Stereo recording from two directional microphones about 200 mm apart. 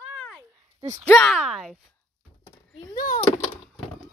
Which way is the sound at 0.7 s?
15° right (ahead or behind).